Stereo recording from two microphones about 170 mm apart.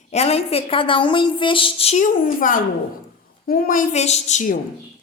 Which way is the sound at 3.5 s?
55° left (ahead or behind).